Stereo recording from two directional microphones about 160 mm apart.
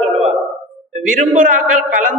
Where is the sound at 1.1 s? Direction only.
55° right (ahead or behind).